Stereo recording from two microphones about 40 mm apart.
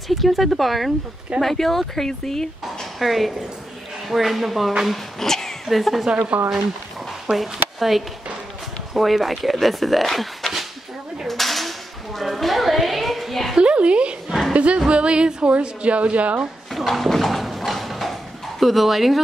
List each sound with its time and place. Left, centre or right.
0.1 s speech: centre
3.0 s speech: centre
5.7 s speech: centre
6.1 s a woman's voice: right
7.2 s speech: centre
11.2 s cap gun: centre
12.2 s a sound: centre
13.6 s a sound: right
14.5 s a woman's voice: right
16.9 s clip-clop: centre
18.6 s speech: centre